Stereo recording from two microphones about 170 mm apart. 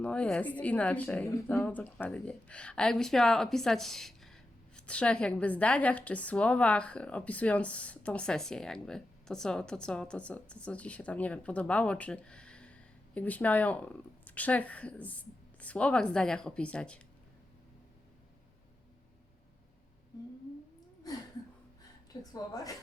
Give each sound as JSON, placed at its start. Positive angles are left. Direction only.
{"t": 0.0, "sound": "a woman's voice", "side_deg": 5}
{"t": 22.2, "sound": "a woman's voice", "side_deg": 20}